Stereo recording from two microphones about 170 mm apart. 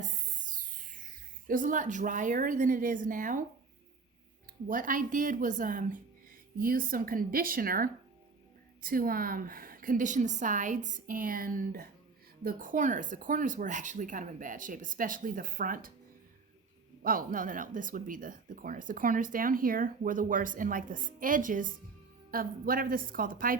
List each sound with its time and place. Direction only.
0.4 s speech: 50° right (ahead or behind)
4.7 s a woman's voice: 50° right (ahead or behind)
17.0 s a woman's voice: 55° right (ahead or behind)